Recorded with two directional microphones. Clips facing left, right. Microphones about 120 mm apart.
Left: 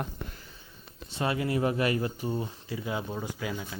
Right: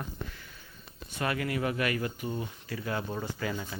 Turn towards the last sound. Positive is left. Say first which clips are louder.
# even
turn(degrees=5)  # may be behind; listen again after turning